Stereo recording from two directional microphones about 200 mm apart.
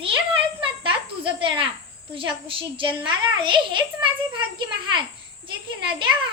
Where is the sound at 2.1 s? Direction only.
25° right (ahead or behind).